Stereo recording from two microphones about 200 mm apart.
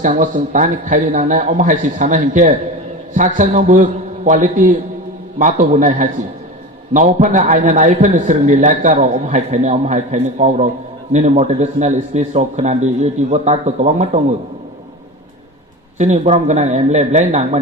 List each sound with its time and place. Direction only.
0.0 s a man's voice: 40° right (ahead or behind)
16.0 s a man's voice: 35° right (ahead or behind)